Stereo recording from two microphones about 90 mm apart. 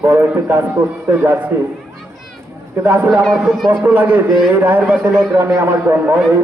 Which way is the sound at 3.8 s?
20° right (ahead or behind).